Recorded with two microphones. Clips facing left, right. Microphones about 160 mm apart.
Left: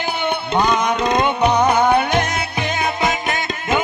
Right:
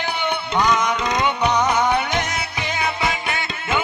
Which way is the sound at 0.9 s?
55° left (ahead or behind).